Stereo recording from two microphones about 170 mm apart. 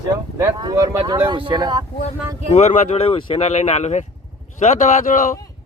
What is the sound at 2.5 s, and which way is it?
Speech, 45° left (ahead or behind).